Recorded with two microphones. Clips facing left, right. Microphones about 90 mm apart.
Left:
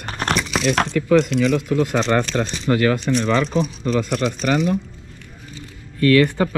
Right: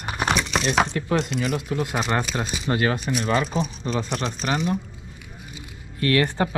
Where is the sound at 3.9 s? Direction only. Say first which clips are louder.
Left 6 dB; centre (ahead or behind).